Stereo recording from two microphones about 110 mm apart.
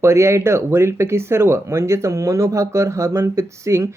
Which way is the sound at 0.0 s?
25° right (ahead or behind).